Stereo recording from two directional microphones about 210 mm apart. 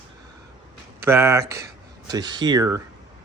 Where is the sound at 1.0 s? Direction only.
10° right (ahead or behind).